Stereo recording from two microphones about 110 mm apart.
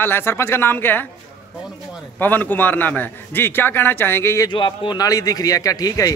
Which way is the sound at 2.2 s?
15° left (ahead or behind).